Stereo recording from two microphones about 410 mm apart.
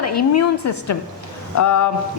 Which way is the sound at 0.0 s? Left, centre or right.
Left.